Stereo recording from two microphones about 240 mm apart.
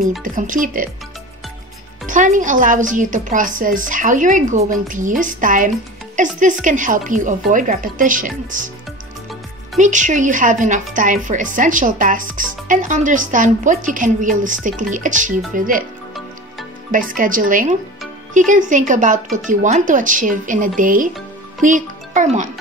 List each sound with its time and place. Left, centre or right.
0.2 s speech: right
2.0 s speech: right
9.8 s speech: right
16.9 s a child's voice: right